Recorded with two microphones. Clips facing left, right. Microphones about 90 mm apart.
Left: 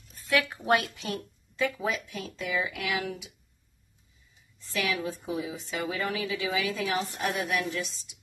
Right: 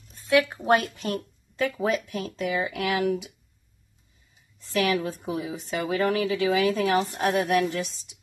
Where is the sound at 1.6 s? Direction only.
55° right (ahead or behind).